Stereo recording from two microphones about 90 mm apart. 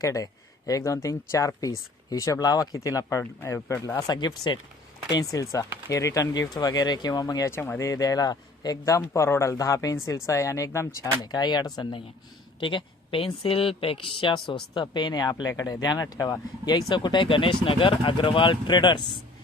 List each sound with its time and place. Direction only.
0.0 s speech: 40° left (ahead or behind)
4.1 s speech: 50° left (ahead or behind)
5.2 s speech: 40° left (ahead or behind)
7.4 s speech: 25° left (ahead or behind)
7.9 s speech: 40° left (ahead or behind)
11.2 s speech: 50° left (ahead or behind)
12.5 s speech: 70° left (ahead or behind); by 16.8 s 45° left (ahead or behind)
16.9 s speech: 60° left (ahead or behind)